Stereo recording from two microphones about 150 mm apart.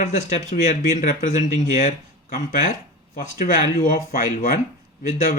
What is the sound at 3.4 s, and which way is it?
Speech, 60° left (ahead or behind).